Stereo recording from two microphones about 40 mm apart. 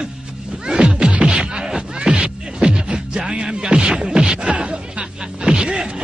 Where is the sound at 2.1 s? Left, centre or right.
Right.